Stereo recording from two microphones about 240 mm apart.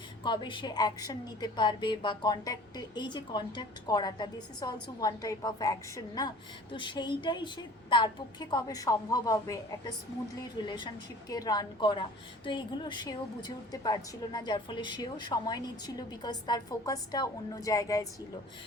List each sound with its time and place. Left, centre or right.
0.2 s a woman's voice: centre
10.6 s a woman's voice: centre